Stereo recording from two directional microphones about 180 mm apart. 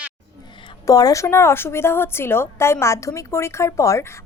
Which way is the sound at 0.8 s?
20° left (ahead or behind).